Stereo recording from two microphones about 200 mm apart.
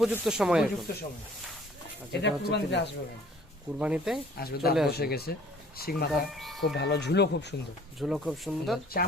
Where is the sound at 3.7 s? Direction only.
5° right (ahead or behind).